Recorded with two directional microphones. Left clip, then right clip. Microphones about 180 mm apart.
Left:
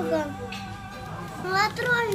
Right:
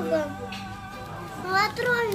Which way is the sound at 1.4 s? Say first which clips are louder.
Even; 10° left (ahead or behind).